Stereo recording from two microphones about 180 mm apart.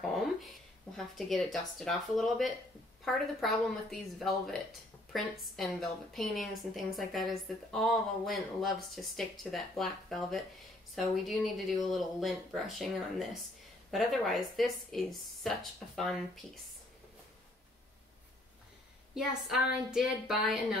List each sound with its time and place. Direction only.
0.0 s a sound: centre (ahead or behind)
0.9 s a woman's voice: centre (ahead or behind)
19.1 s a woman's voice: centre (ahead or behind)